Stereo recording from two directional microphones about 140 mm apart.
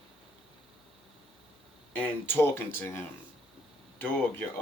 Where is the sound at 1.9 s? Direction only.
15° left (ahead or behind).